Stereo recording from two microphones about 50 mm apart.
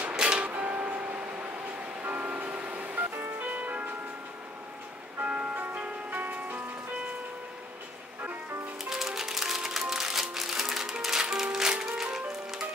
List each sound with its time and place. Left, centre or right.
0.1 s music: centre
0.6 s music: right
2.0 s vehicle: right
3.3 s music: right
5.2 s music: right
8.9 s music: centre